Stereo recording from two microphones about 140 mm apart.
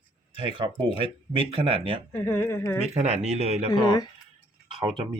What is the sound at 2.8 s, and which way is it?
Speech, 50° right (ahead or behind).